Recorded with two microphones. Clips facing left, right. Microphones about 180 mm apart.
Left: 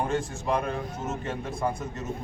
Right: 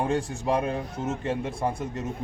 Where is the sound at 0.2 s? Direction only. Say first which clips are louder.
Right 2 dB; 35° right (ahead or behind).